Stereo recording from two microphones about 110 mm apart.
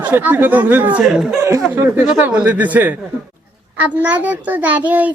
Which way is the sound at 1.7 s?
15° right (ahead or behind).